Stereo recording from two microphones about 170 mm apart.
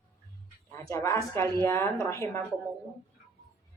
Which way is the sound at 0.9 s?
15° left (ahead or behind).